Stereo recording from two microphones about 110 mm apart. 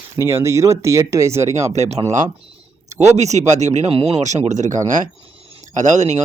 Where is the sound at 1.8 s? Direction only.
80° right.